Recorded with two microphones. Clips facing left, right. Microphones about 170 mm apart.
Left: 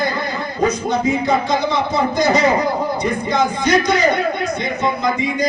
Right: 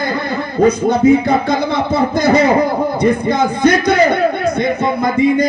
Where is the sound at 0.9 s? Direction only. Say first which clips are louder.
Right 6 dB; 55° right (ahead or behind).